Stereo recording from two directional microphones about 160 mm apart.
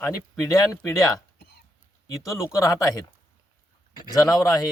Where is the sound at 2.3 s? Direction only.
Centre (ahead or behind).